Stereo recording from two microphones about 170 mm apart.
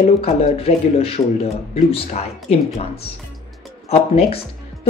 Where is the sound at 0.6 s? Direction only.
35° left (ahead or behind).